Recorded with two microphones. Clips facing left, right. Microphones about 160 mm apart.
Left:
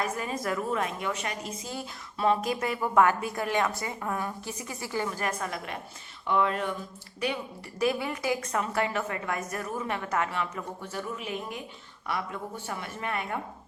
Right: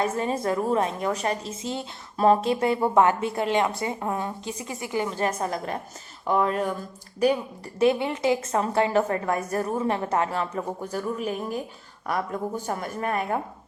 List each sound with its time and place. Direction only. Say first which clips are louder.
0.0 s a woman's voice: right 6 dB; 30° right (ahead or behind)
2.1 s a woman's voice: right 6 dB; 35° right (ahead or behind)
7.8 s a woman's voice: right 6 dB; 25° right (ahead or behind); by 13.4 s 40° right (ahead or behind)